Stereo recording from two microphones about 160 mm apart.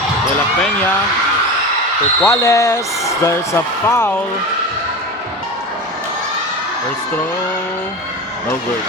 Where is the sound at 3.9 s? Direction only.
15° left (ahead or behind).